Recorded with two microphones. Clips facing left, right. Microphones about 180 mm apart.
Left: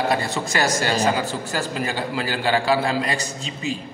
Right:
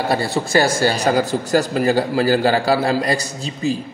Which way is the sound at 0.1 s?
35° right (ahead or behind).